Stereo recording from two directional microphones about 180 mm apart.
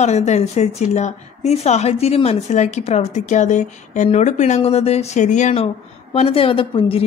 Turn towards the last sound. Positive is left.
turn(degrees=30)  # may be behind; listen again after turning